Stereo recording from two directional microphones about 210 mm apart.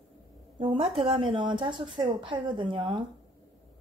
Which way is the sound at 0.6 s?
25° right (ahead or behind).